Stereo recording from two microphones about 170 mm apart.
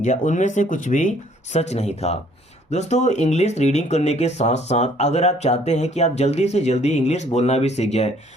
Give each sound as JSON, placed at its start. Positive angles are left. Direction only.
{"t": 0.0, "sound": "speech", "side_deg": 45}